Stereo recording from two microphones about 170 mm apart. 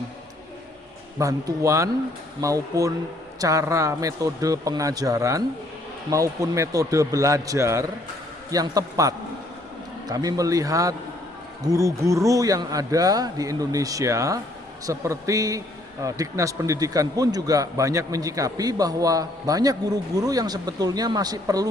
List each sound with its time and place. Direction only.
1.2 s a man's voice: 20° right (ahead or behind)